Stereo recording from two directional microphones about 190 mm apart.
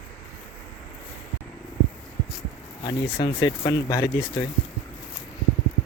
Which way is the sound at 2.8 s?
25° left (ahead or behind).